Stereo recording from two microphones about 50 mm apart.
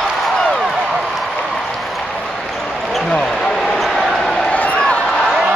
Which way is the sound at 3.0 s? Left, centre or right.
Centre.